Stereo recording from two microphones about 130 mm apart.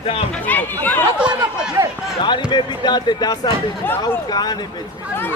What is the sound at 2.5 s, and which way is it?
Speech, 35° left (ahead or behind).